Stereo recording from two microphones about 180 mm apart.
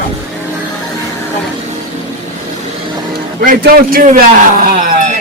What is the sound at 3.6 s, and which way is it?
A man's voice, 55° right (ahead or behind).